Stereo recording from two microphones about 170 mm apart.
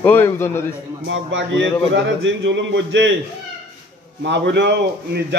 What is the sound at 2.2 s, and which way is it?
Speech, 90° right.